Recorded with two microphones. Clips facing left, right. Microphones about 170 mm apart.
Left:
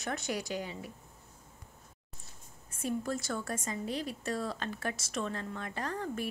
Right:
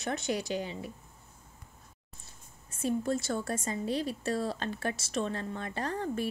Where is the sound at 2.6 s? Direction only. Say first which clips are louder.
Right 4 dB; 25° right (ahead or behind).